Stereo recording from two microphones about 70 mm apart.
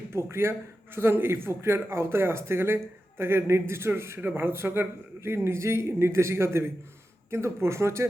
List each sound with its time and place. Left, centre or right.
0.1 s speech: right